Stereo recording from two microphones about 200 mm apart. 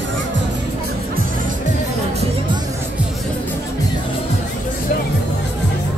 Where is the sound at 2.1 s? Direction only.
25° right (ahead or behind).